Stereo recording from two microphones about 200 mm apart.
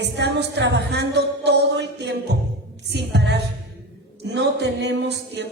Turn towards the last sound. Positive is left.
turn(degrees=-60)  # may be behind; listen again after turning